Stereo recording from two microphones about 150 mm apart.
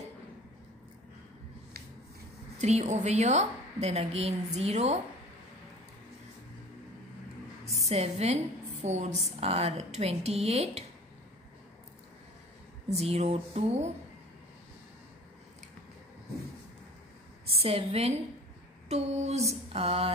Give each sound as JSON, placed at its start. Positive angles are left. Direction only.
{"t": 2.6, "sound": "a woman's voice", "side_deg": -50}
{"t": 7.8, "sound": "a woman's voice", "side_deg": -45}
{"t": 12.9, "sound": "a woman's voice", "side_deg": -45}
{"t": 17.5, "sound": "a woman's voice", "side_deg": -40}